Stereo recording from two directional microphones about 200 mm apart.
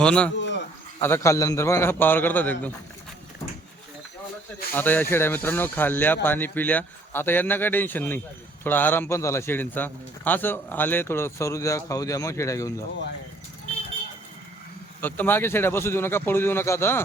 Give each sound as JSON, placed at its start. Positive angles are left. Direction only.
{"t": 0.0, "sound": "speech", "side_deg": 5}
{"t": 0.3, "sound": "insect", "side_deg": 60}
{"t": 1.0, "sound": "a man's voice", "side_deg": 15}
{"t": 4.7, "sound": "a man's voice", "side_deg": 10}
{"t": 15.0, "sound": "a man's voice", "side_deg": 10}